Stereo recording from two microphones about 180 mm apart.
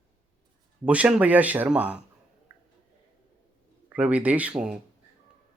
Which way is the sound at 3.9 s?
5° right (ahead or behind).